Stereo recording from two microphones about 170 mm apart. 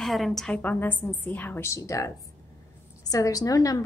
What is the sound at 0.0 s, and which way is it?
A woman's voice, centre (ahead or behind).